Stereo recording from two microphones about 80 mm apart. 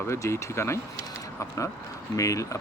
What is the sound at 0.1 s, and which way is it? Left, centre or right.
Speech, left.